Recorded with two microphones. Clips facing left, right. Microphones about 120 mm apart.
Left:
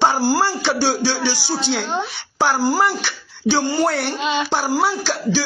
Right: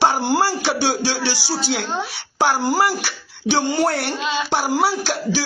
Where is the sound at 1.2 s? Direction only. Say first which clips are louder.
Left 2 dB; 15° left (ahead or behind).